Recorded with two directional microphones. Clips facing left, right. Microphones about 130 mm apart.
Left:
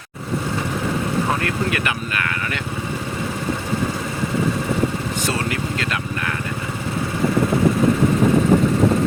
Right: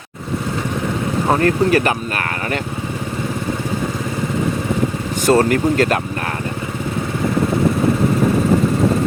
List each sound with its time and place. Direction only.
1.3 s speech: 40° right (ahead or behind)
5.2 s speech: 45° right (ahead or behind)